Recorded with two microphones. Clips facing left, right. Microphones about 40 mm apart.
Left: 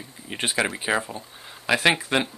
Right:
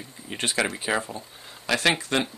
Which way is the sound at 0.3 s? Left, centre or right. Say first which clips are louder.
Left 1 dB; centre.